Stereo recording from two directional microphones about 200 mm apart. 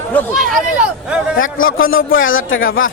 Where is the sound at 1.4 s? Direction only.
90° left.